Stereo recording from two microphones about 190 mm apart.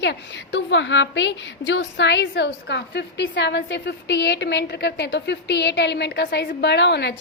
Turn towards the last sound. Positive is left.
turn(degrees=65)  # may be behind; listen again after turning